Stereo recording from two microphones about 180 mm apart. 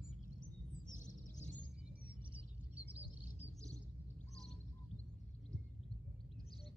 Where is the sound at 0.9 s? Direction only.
45° left (ahead or behind).